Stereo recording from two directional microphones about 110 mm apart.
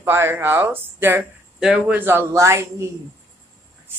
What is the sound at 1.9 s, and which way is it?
Speech, 20° right (ahead or behind).